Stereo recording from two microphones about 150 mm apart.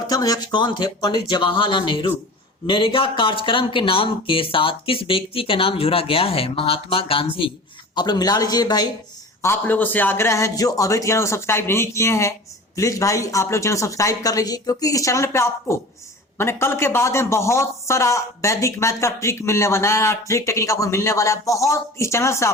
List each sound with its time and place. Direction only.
0.1 s speech: 25° left (ahead or behind)
9.4 s speech: 15° left (ahead or behind)